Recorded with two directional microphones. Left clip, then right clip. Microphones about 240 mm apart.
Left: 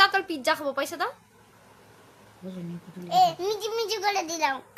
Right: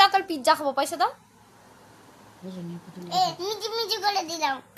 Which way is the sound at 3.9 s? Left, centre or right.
Centre.